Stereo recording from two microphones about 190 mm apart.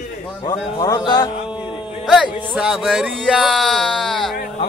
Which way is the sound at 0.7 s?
20° left (ahead or behind).